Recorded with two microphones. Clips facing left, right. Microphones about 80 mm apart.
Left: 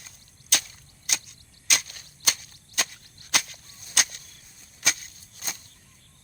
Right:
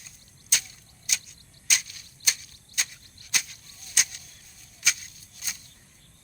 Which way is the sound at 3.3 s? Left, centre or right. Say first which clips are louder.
Left 4 dB; left.